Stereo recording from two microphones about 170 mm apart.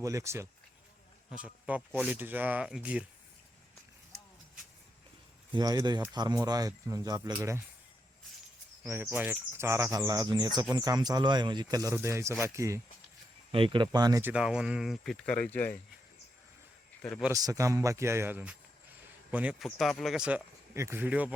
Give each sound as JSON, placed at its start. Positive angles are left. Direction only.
{"t": 0.0, "sound": "speech", "side_deg": -20}
{"t": 5.5, "sound": "speech", "side_deg": -20}
{"t": 8.9, "sound": "speech", "side_deg": -15}
{"t": 13.5, "sound": "speech", "side_deg": -30}
{"t": 14.3, "sound": "speech", "side_deg": -5}
{"t": 17.0, "sound": "speech", "side_deg": 5}
{"t": 17.3, "sound": "speech", "side_deg": -20}